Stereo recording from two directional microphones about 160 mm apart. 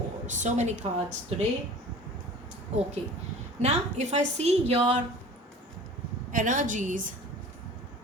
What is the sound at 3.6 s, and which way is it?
A woman's voice, 45° right (ahead or behind).